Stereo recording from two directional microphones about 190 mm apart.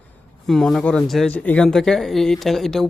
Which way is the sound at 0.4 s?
Centre (ahead or behind).